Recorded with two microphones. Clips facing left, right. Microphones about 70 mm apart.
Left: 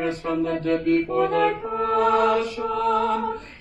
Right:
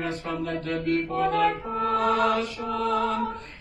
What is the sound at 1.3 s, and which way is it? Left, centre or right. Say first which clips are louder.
Music: left 2 dB; centre.